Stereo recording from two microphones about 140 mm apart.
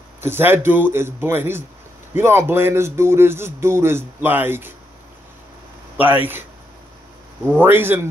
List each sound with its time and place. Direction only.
0.2 s speech: 15° right (ahead or behind)
6.0 s speech: 15° right (ahead or behind)
7.4 s speech: 15° right (ahead or behind)